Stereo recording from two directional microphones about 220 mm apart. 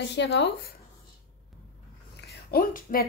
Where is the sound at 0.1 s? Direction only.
50° left (ahead or behind).